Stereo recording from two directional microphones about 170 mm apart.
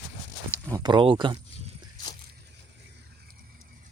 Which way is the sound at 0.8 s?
30° right (ahead or behind).